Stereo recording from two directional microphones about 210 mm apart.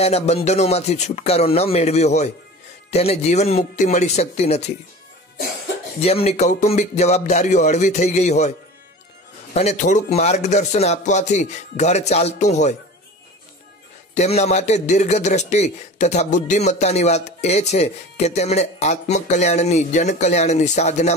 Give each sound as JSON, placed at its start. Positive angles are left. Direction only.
{"t": 0.0, "sound": "a man's voice", "side_deg": 30}
{"t": 5.9, "sound": "a man's voice", "side_deg": 30}
{"t": 14.1, "sound": "a man's voice", "side_deg": 30}